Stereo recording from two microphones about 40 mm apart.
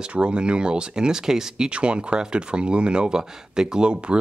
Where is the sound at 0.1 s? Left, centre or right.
Right.